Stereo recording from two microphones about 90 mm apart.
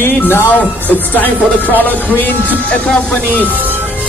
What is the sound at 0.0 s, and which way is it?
Music, 25° left (ahead or behind).